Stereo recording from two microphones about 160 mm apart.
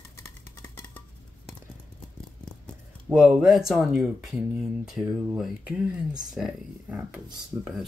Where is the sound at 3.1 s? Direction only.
5° right (ahead or behind).